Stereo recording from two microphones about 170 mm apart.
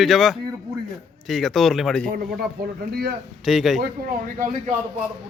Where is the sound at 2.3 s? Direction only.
65° right (ahead or behind).